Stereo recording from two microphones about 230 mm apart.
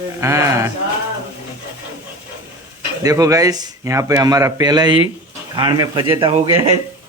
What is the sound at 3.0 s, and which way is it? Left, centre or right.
Speech, centre.